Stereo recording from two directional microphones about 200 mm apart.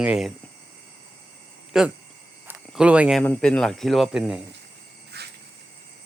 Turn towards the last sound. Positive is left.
turn(degrees=-55)  # may be behind; listen again after turning